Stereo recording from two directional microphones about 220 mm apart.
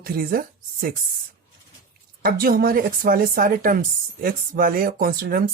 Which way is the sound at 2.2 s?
45° right (ahead or behind).